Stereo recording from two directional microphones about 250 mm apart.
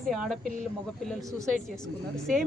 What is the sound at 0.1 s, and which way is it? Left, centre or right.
Speech, centre.